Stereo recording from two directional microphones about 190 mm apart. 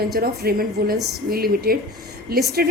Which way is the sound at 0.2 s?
55° right (ahead or behind).